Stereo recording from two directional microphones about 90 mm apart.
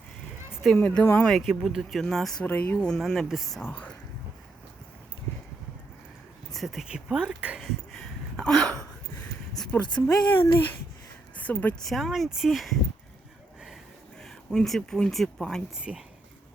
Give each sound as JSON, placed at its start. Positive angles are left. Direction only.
{"t": 0.8, "sound": "speech", "side_deg": 15}
{"t": 1.3, "sound": "speech", "side_deg": 0}
{"t": 2.5, "sound": "speech", "side_deg": 20}
{"t": 2.9, "sound": "speech", "side_deg": 0}
{"t": 3.6, "sound": "speech", "side_deg": 20}
{"t": 6.5, "sound": "speech", "side_deg": 0}
{"t": 7.6, "sound": "a sound", "side_deg": 5}
{"t": 9.7, "sound": "speech", "side_deg": 20}
{"t": 11.3, "sound": "a sound", "side_deg": 15}
{"t": 11.8, "sound": "speech", "side_deg": 0}
{"t": 14.2, "sound": "speech", "side_deg": 5}
{"t": 15.7, "sound": "speech", "side_deg": -10}